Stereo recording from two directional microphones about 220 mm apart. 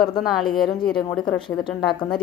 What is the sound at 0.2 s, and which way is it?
A woman's voice, centre (ahead or behind).